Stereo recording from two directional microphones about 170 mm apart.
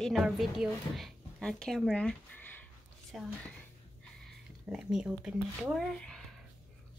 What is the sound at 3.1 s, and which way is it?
Speech, centre (ahead or behind).